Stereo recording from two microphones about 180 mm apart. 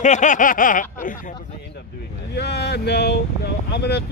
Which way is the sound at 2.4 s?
65° left (ahead or behind).